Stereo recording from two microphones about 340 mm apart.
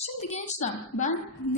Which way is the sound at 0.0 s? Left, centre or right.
Centre.